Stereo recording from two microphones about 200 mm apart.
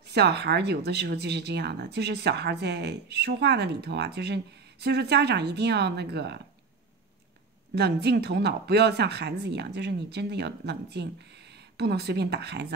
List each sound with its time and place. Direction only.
0.1 s speech: 55° right (ahead or behind)
7.7 s speech: 55° right (ahead or behind)